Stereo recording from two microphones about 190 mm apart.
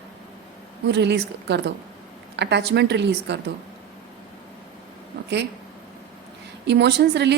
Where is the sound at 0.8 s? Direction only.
65° right (ahead or behind).